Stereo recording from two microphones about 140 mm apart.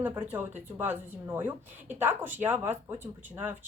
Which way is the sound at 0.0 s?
10° right (ahead or behind).